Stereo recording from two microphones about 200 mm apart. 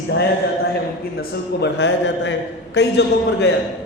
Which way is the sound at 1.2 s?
60° left (ahead or behind).